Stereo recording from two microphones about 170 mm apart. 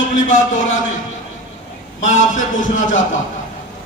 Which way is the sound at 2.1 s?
50° left (ahead or behind).